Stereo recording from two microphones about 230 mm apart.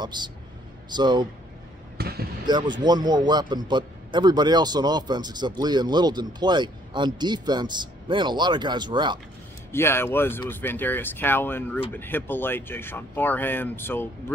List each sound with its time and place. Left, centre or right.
0.0 s a man's voice: centre
2.0 s speech: right
2.4 s a man's voice: centre
9.7 s speech: centre